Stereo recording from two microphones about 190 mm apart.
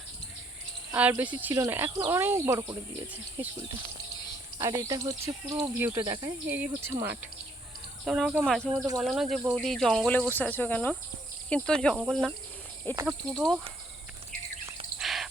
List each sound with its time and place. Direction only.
0.9 s speech: 10° right (ahead or behind)
8.0 s speech: 5° right (ahead or behind)
9.4 s speech: 10° right (ahead or behind)
9.6 s speech: centre (ahead or behind)
10.3 s cricket: 10° left (ahead or behind)
11.4 s speech: 5° left (ahead or behind)
14.9 s bird: centre (ahead or behind)